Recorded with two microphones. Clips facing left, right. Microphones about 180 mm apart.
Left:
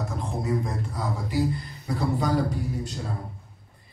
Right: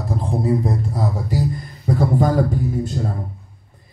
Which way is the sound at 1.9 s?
50° right (ahead or behind).